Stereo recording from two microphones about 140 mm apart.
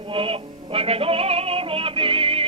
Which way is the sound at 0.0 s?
40° right (ahead or behind).